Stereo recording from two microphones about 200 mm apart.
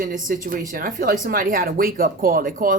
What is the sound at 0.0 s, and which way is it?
Speech, 45° right (ahead or behind).